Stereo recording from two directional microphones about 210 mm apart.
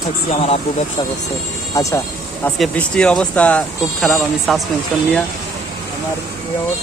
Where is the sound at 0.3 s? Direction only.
30° left (ahead or behind).